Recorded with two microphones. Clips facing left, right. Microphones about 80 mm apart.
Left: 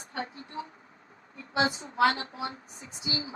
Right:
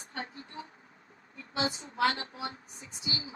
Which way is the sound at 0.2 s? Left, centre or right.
Left.